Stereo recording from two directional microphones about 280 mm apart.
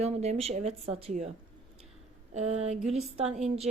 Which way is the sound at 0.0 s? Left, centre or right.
Right.